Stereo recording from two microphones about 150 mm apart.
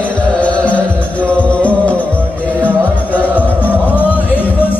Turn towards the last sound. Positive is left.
turn(degrees=10)  # may be behind; listen again after turning